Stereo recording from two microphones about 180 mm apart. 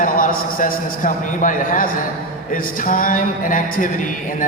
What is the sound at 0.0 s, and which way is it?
A woman's voice, 50° left (ahead or behind).